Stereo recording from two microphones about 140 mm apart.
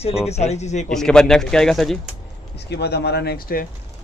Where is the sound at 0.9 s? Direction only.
5° left (ahead or behind).